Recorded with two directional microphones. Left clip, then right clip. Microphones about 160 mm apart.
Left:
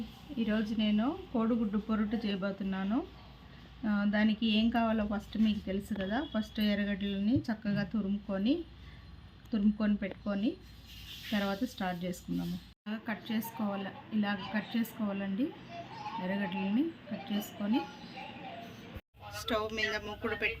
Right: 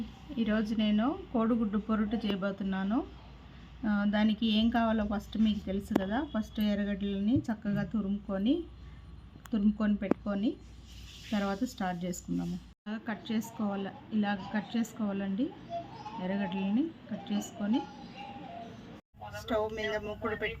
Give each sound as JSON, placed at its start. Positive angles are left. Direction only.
{"t": 0.3, "sound": "speech", "side_deg": 0}
{"t": 12.8, "sound": "a woman's voice", "side_deg": -15}
{"t": 19.3, "sound": "speech", "side_deg": -30}